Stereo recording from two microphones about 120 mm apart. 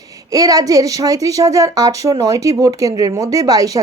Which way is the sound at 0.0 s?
30° right (ahead or behind).